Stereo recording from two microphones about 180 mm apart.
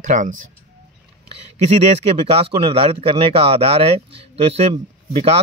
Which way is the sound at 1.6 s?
40° right (ahead or behind).